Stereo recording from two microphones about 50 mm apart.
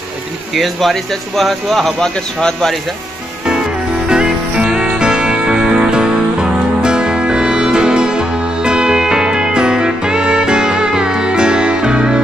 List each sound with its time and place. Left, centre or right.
0.6 s speech: centre
2.0 s speech: centre
4.1 s music: centre